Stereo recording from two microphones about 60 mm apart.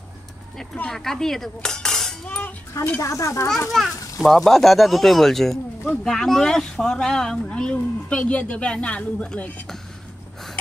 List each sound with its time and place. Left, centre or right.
0.8 s a sound: centre
2.2 s a woman's voice: left
3.0 s speech: left
3.7 s speech: centre
6.0 s a sound: centre
7.4 s a woman's voice: centre